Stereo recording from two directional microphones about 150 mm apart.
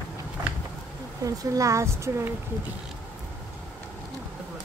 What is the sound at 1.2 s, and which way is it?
A woman's voice, 25° right (ahead or behind).